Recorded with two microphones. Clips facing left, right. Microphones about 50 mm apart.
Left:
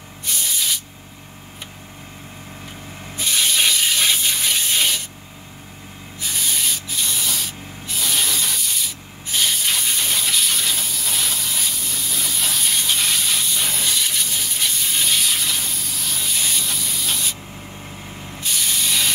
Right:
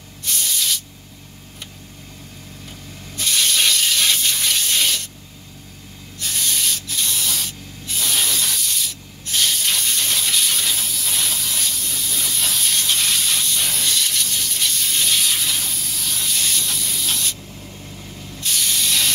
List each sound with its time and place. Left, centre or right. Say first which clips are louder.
0.2 s spray: even; centre
3.2 s water tap: even; centre
6.1 s spray: even; centre
18.1 s spray: left 2 dB; left
18.4 s spray: right 1 dB; centre